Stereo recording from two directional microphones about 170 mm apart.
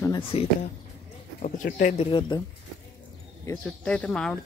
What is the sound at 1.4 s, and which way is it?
Speech, 50° left (ahead or behind).